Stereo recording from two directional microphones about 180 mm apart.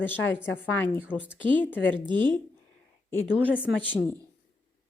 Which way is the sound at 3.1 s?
10° left (ahead or behind).